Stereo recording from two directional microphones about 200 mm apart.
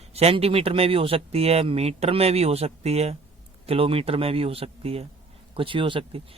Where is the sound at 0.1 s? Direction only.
30° right (ahead or behind).